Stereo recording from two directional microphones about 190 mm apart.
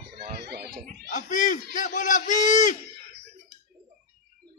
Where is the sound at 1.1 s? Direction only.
40° left (ahead or behind).